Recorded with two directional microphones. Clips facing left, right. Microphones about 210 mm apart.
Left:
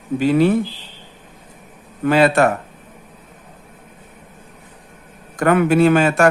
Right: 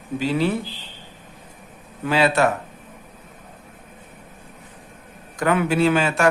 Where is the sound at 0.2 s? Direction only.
50° left (ahead or behind).